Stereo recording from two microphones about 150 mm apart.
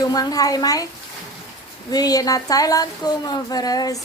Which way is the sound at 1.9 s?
25° left (ahead or behind).